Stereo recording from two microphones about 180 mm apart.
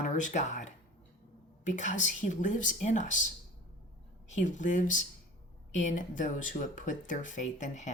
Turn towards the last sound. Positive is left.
turn(degrees=40)  # may be behind; listen again after turning